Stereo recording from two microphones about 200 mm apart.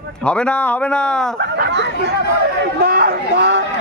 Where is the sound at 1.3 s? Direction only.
55° right (ahead or behind).